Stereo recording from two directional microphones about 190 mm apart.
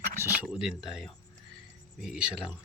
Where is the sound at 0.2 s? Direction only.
5° right (ahead or behind).